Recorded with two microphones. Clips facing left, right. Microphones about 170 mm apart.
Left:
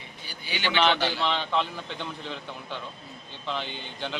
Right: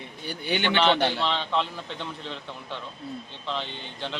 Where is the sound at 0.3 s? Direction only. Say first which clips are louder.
Right 5 dB; 60° right (ahead or behind).